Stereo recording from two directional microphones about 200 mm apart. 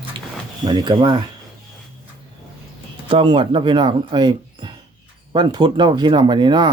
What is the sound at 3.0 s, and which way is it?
Speech, 25° right (ahead or behind).